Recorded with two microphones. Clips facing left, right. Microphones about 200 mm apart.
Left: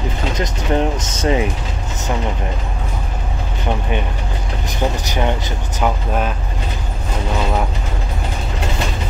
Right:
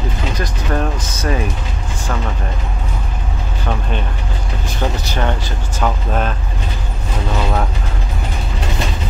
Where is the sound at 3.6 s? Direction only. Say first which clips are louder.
Left 2 dB; 15° left (ahead or behind).